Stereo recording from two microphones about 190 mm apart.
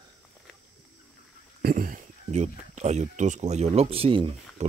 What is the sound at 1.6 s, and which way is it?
Speech, 50° right (ahead or behind).